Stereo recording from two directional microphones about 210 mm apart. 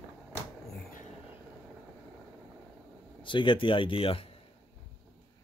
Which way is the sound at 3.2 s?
25° left (ahead or behind).